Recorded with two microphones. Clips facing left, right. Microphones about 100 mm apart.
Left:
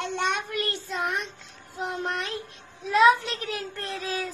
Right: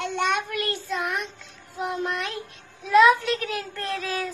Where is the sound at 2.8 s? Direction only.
30° left (ahead or behind).